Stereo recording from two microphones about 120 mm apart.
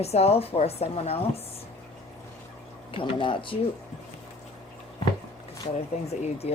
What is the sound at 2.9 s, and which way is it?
Speech, 45° left (ahead or behind).